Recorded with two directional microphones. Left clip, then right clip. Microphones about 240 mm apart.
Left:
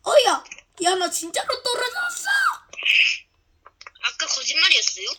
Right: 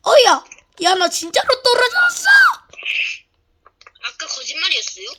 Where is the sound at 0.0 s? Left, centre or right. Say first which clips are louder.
Right 6 dB; right.